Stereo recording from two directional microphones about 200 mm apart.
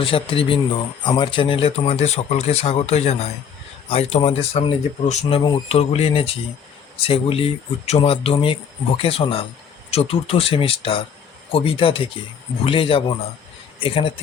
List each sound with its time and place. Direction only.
0.0 s a man's voice: 25° left (ahead or behind)